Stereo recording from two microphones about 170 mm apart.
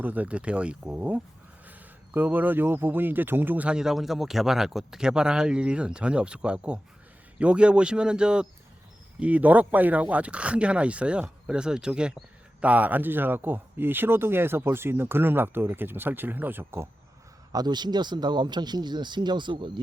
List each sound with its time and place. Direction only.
0.0 s speech: 10° right (ahead or behind)
17.5 s speech: 25° right (ahead or behind)